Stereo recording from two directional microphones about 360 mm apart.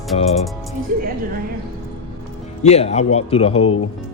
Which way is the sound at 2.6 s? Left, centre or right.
Centre.